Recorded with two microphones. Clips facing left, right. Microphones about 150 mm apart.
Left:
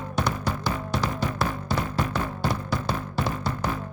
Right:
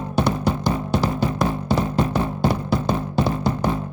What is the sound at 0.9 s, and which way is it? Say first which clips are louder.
Music: right 6 dB; 30° right (ahead or behind).